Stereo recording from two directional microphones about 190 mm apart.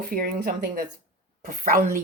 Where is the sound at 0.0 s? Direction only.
50° right (ahead or behind).